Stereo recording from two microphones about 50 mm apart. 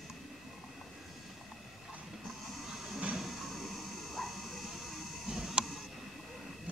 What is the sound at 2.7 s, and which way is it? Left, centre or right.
Music, right.